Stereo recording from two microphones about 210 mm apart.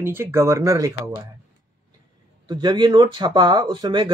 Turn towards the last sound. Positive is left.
turn(degrees=-20)  # may be behind; listen again after turning